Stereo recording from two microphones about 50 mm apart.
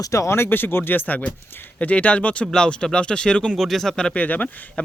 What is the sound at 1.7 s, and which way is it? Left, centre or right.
Speech, left.